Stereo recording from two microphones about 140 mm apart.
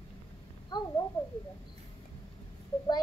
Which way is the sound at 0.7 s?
30° left (ahead or behind).